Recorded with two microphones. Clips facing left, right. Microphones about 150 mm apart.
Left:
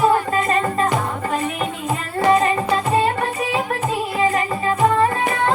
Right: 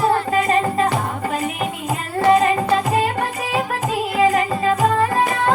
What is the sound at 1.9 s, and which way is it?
Music, 35° right (ahead or behind).